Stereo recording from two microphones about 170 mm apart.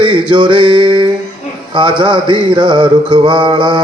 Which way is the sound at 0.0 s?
25° right (ahead or behind).